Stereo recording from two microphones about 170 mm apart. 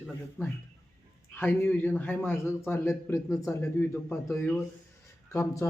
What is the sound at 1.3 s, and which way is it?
A man's voice, 10° left (ahead or behind).